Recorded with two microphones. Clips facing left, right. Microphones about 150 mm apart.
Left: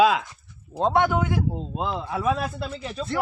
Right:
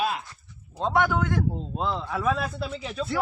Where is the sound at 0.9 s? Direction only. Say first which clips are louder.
Even; 20° left (ahead or behind).